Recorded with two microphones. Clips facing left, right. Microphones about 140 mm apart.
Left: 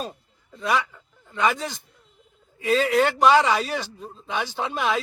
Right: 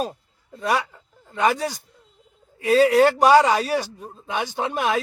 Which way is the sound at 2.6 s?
40° right (ahead or behind).